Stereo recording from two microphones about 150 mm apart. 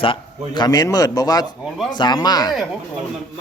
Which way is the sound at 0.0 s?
35° left (ahead or behind).